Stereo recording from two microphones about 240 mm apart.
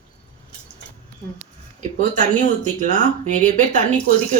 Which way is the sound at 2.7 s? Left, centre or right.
Right.